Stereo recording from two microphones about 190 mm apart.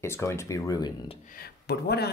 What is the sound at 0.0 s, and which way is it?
Speech, 15° left (ahead or behind).